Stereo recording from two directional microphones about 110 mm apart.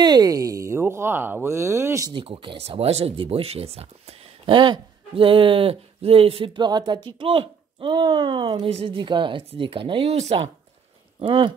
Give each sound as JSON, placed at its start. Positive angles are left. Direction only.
{"t": 0.0, "sound": "speech", "side_deg": -35}
{"t": 2.2, "sound": "speech", "side_deg": -60}
{"t": 4.5, "sound": "speech", "side_deg": -45}
{"t": 8.6, "sound": "speech", "side_deg": -55}
{"t": 11.1, "sound": "speech", "side_deg": -50}